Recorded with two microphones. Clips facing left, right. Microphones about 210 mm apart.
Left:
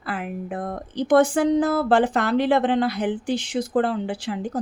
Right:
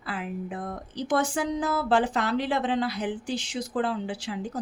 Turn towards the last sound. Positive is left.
turn(degrees=55)  # may be behind; listen again after turning